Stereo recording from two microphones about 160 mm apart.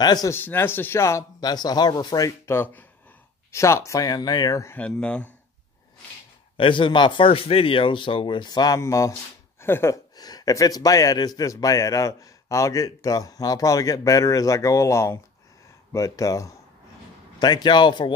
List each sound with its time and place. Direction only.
0.0 s speech: 25° left (ahead or behind)
0.4 s speech: 15° left (ahead or behind)
6.5 s a man's voice: 30° left (ahead or behind)